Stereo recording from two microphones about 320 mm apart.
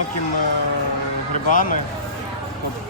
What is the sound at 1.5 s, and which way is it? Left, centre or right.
Speech, left.